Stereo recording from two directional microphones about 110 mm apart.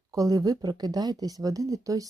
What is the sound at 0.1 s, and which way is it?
Speech, 35° right (ahead or behind).